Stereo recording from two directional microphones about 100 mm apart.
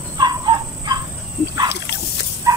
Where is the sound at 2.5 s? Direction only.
35° right (ahead or behind).